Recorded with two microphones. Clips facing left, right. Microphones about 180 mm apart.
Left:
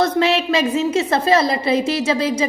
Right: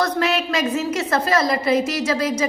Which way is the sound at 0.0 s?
25° left (ahead or behind).